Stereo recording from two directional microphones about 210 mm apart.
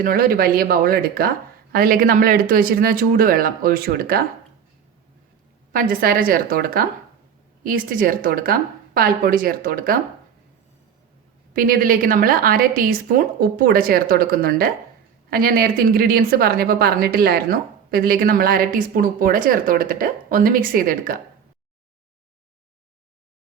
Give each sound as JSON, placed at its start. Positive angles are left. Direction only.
{"t": 0.0, "sound": "a woman's voice", "side_deg": -45}
{"t": 5.7, "sound": "a woman's voice", "side_deg": -45}
{"t": 11.5, "sound": "a woman's voice", "side_deg": -40}